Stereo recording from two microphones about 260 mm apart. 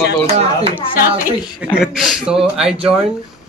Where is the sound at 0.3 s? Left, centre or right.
Right.